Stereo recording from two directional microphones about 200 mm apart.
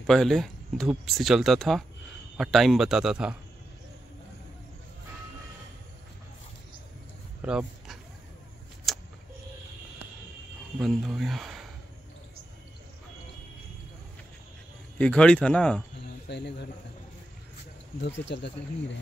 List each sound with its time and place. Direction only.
0.0 s speech: centre (ahead or behind)
7.4 s speech: 5° right (ahead or behind)
8.9 s a sound: centre (ahead or behind)
10.8 s speech: centre (ahead or behind)
15.0 s speech: 5° left (ahead or behind)
16.3 s speech: 60° left (ahead or behind)
18.0 s speech: 60° left (ahead or behind)